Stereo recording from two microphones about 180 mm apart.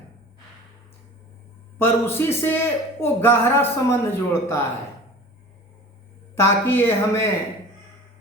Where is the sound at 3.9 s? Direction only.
15° left (ahead or behind).